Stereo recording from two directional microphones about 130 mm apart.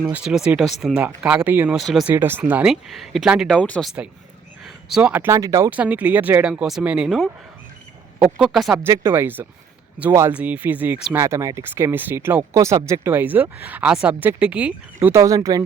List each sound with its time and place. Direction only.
0.0 s speech: 5° right (ahead or behind)
1.8 s speech: centre (ahead or behind)
2.0 s speech: 15° right (ahead or behind)
2.9 s speech: centre (ahead or behind)
3.5 s speech: 5° left (ahead or behind)
4.6 s a sound: 5° right (ahead or behind)
5.2 s speech: 25° right (ahead or behind)
5.7 s speech: 10° right (ahead or behind)
8.7 s speech: 20° right (ahead or behind)
15.0 s speech: 25° right (ahead or behind)